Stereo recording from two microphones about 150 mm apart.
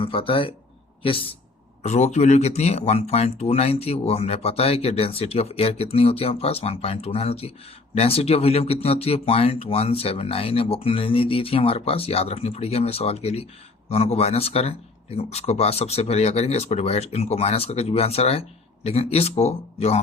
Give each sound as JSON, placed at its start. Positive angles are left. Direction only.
{"t": 0.0, "sound": "speech", "side_deg": 35}
{"t": 1.8, "sound": "speech", "side_deg": 50}